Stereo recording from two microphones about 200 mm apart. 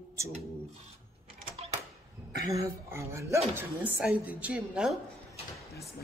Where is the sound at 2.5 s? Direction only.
15° right (ahead or behind).